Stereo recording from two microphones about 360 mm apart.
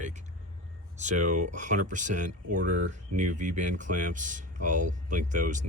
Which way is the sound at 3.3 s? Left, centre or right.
Right.